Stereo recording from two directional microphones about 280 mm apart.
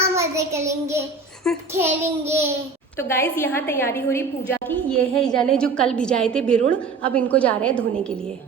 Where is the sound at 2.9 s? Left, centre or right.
Centre.